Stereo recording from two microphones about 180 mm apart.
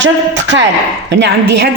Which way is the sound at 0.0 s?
85° right.